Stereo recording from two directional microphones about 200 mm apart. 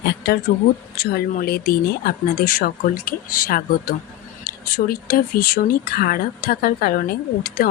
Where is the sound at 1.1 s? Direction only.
50° left (ahead or behind).